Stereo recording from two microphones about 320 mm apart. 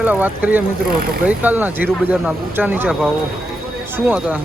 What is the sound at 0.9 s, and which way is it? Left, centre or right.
Speech, right.